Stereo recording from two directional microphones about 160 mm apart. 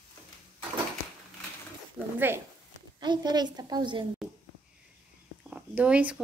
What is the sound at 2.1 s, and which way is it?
Speech, 15° right (ahead or behind).